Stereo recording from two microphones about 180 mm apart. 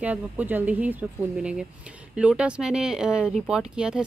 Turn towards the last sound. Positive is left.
turn(degrees=-5)  # may be behind; listen again after turning